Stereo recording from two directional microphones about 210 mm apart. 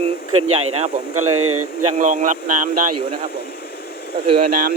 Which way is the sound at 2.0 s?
35° right (ahead or behind).